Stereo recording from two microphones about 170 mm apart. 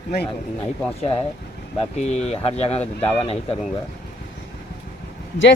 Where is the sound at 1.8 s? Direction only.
40° left (ahead or behind).